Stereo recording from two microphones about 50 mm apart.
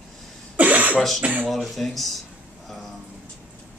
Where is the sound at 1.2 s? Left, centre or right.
Right.